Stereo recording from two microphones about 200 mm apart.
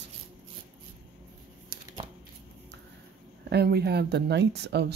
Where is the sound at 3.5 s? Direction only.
55° right (ahead or behind).